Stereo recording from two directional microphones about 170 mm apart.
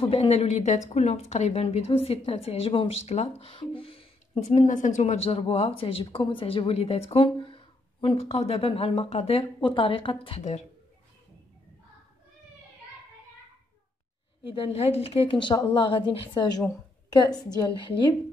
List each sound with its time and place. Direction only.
0.0 s speech: 35° left (ahead or behind)
4.5 s speech: 50° left (ahead or behind)
14.4 s a woman's voice: 30° left (ahead or behind)